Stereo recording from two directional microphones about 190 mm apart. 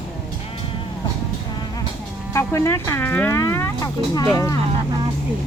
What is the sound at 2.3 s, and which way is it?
Speech, 15° left (ahead or behind).